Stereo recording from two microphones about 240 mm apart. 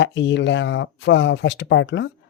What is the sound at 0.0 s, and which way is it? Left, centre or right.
Speech, left.